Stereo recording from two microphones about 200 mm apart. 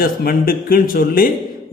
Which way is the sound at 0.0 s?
45° left (ahead or behind).